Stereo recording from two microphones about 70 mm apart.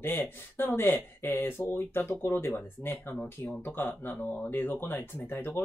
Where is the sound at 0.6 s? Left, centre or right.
Left.